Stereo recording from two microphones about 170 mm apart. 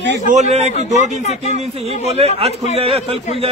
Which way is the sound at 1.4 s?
40° right (ahead or behind).